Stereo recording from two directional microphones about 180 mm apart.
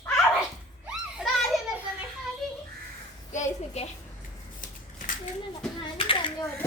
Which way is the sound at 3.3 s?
40° left (ahead or behind).